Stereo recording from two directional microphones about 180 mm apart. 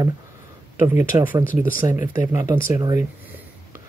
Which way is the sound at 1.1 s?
25° right (ahead or behind).